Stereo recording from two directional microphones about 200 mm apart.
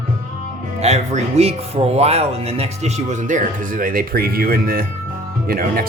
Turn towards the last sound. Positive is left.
turn(degrees=-45)  # may be behind; listen again after turning